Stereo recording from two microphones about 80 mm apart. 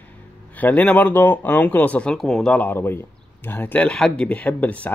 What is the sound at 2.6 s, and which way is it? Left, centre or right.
Speech, left.